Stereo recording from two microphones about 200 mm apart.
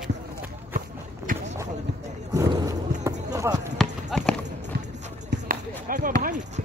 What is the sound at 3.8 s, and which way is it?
Clip-clop, centre (ahead or behind).